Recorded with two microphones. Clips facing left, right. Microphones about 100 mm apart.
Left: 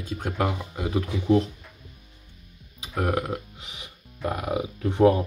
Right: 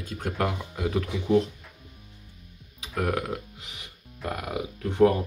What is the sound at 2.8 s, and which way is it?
Speech, 5° left (ahead or behind).